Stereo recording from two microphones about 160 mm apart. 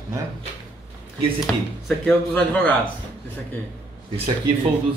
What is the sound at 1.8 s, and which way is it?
Speech, 5° left (ahead or behind).